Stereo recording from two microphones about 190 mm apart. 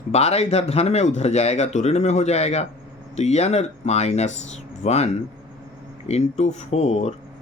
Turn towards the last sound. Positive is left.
turn(degrees=35)  # may be behind; listen again after turning